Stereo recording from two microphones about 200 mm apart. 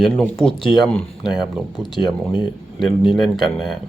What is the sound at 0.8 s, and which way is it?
Speech, 5° left (ahead or behind).